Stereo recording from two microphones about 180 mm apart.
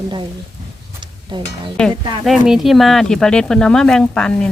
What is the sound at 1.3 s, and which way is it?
Speech, 25° right (ahead or behind).